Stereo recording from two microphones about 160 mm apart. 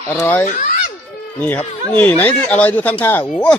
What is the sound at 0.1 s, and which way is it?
Speech, 10° left (ahead or behind).